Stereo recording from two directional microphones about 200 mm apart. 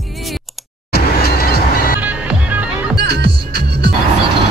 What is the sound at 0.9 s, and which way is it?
Vehicle, 50° left (ahead or behind).